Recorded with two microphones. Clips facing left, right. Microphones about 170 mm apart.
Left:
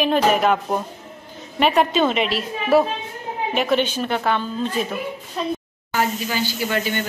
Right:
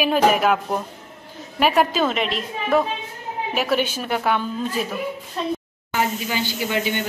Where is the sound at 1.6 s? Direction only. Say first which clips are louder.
Left 1 dB; 5° right (ahead or behind).